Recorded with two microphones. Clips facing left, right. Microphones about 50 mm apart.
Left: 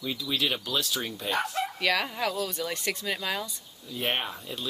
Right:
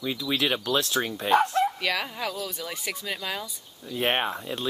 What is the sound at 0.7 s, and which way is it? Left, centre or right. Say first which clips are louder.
Speech: right 5 dB; right.